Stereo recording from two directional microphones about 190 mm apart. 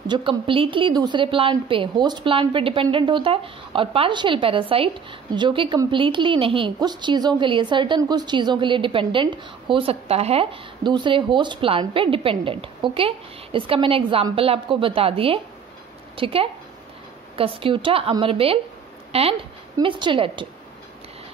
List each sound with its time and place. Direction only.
0.1 s a woman's voice: 25° right (ahead or behind)